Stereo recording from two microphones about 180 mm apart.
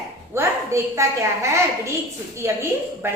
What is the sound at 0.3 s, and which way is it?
A woman's voice, 15° right (ahead or behind).